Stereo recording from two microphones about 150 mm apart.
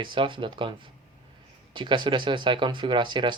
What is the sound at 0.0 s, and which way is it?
Speech, 35° right (ahead or behind).